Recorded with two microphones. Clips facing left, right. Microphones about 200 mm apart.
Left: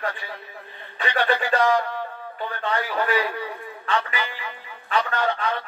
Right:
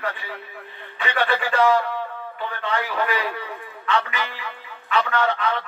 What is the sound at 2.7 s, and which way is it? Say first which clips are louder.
Speech: left 1 dB; 10° left (ahead or behind).